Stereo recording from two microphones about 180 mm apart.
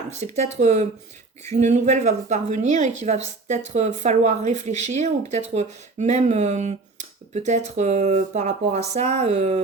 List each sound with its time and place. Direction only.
0.1 s speech: 40° right (ahead or behind)